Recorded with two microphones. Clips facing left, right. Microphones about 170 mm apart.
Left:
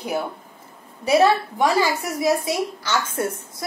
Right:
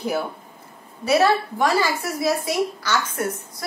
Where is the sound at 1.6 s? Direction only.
20° left (ahead or behind).